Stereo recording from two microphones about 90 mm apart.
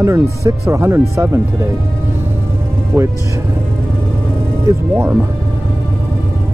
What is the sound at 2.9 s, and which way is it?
Speech, 20° right (ahead or behind).